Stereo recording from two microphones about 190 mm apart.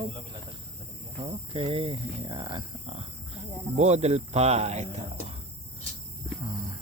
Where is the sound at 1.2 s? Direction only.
30° right (ahead or behind).